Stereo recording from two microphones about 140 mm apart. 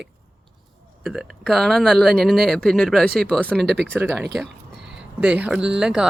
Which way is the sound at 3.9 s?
15° right (ahead or behind).